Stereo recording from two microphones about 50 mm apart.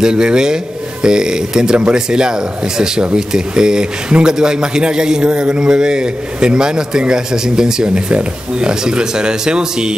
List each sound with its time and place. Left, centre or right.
0.0 s speech: centre